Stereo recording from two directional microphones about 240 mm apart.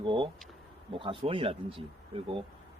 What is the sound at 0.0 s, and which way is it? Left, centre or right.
Speech, right.